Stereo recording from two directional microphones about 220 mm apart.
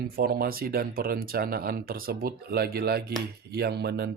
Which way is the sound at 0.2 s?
45° right (ahead or behind).